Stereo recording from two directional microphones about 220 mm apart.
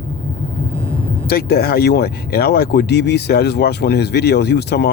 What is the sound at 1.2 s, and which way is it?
Speech, 45° left (ahead or behind).